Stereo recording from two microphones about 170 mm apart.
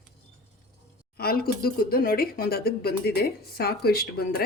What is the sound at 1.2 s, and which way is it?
Speech, 65° left (ahead or behind).